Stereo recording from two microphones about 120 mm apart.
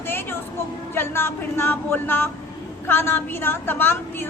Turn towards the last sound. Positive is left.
turn(degrees=20)  # may be behind; listen again after turning